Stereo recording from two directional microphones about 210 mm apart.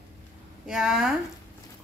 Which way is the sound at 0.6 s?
5° right (ahead or behind).